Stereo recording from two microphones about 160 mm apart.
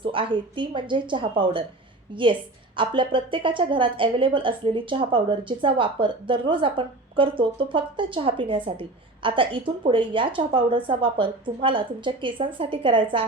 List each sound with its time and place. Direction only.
0.0 s a woman's voice: 35° right (ahead or behind)